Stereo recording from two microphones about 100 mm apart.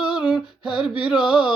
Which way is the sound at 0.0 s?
10° right (ahead or behind).